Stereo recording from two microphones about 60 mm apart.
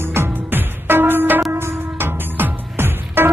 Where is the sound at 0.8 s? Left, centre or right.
Right.